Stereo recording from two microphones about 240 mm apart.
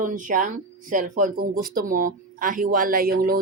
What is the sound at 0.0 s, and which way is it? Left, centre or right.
Speech, right.